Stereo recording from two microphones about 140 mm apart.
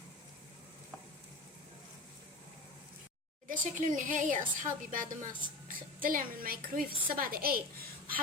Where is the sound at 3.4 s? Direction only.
70° right (ahead or behind).